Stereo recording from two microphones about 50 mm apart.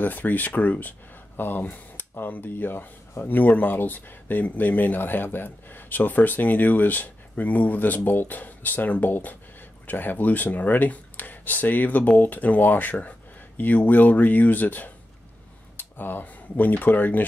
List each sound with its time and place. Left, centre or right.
0.0 s speech: left